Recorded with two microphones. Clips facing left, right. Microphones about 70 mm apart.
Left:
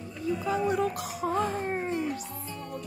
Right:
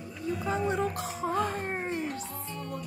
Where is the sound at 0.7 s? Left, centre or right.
Right.